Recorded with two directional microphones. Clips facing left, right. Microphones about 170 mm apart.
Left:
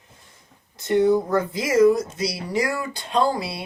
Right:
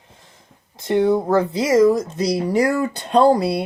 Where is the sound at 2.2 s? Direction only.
35° right (ahead or behind).